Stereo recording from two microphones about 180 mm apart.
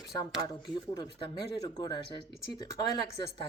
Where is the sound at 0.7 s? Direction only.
25° left (ahead or behind).